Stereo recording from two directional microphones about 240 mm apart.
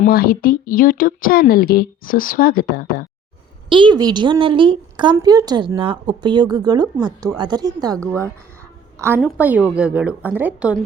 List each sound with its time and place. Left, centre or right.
0.0 s speech: left
3.7 s speech: centre
9.0 s speech: centre